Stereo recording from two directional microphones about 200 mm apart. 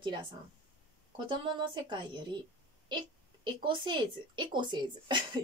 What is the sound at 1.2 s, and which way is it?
Speech, 25° right (ahead or behind).